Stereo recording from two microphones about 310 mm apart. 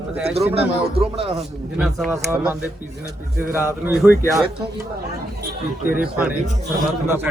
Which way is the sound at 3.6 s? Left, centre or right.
Centre.